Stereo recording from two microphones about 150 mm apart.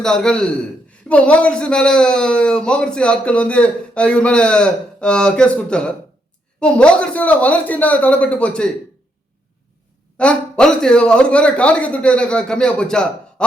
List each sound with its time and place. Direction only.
0.0 s a man's voice: 5° left (ahead or behind)
10.2 s speech: 5° left (ahead or behind)